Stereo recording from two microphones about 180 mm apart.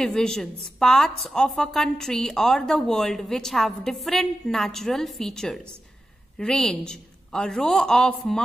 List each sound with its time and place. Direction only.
0.0 s a woman's voice: 5° left (ahead or behind)